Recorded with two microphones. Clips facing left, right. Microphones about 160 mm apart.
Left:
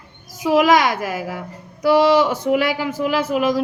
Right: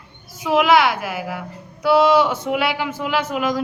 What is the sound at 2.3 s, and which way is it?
A woman's voice, 35° left (ahead or behind).